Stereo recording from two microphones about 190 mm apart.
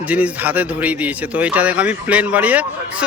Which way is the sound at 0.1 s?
10° right (ahead or behind).